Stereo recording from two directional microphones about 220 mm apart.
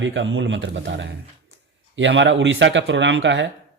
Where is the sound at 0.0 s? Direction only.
55° right (ahead or behind).